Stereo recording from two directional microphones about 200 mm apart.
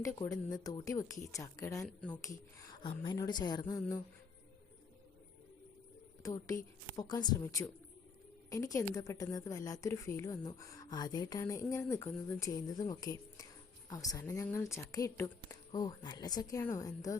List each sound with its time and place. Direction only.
0.0 s a woman's voice: 15° left (ahead or behind)
6.2 s a woman's voice: 15° left (ahead or behind)